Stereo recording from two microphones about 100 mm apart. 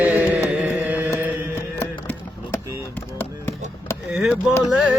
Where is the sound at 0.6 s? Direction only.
15° right (ahead or behind).